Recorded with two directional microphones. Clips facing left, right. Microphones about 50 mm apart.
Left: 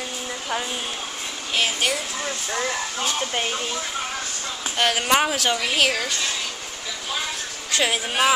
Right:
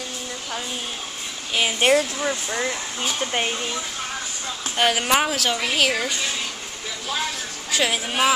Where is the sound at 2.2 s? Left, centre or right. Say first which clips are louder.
Right 2 dB; centre.